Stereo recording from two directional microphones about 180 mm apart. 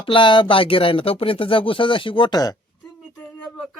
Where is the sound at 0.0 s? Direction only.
30° left (ahead or behind).